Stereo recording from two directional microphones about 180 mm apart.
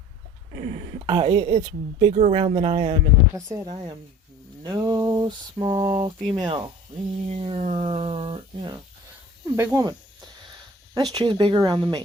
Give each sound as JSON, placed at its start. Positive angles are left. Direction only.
{"t": 0.5, "sound": "a sound", "side_deg": -40}
{"t": 1.0, "sound": "a woman's voice", "side_deg": -30}
{"t": 9.6, "sound": "speech", "side_deg": -20}
{"t": 10.9, "sound": "speech", "side_deg": -20}